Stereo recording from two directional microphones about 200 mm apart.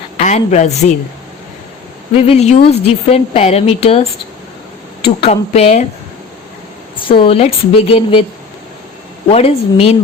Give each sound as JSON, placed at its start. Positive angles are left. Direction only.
{"t": 0.3, "sound": "a woman's voice", "side_deg": 35}
{"t": 2.1, "sound": "a woman's voice", "side_deg": 30}
{"t": 5.0, "sound": "a woman's voice", "side_deg": 30}
{"t": 6.9, "sound": "a woman's voice", "side_deg": 25}
{"t": 9.3, "sound": "a woman's voice", "side_deg": 30}